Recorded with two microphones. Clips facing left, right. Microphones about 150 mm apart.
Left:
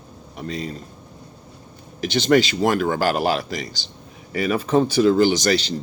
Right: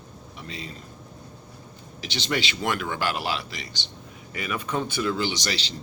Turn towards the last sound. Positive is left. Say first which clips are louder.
# left 11 dB
turn(degrees=45)  # may be behind; listen again after turning